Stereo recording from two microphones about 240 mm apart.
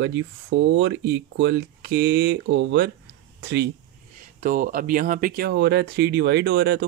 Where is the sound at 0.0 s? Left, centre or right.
Right.